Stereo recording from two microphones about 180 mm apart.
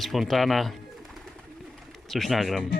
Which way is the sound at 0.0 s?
Centre (ahead or behind).